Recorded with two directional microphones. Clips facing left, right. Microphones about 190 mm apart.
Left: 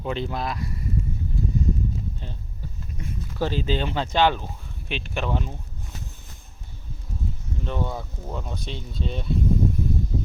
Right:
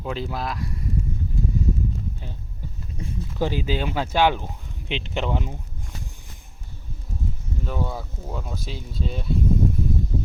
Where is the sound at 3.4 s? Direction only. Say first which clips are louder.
Even; 10° right (ahead or behind).